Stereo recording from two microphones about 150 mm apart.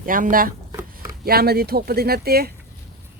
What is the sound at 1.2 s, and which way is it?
Speech, 90° right.